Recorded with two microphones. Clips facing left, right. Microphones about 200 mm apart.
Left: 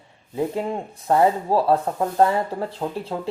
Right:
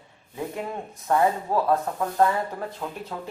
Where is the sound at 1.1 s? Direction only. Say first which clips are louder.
Left 4 dB; 30° left (ahead or behind).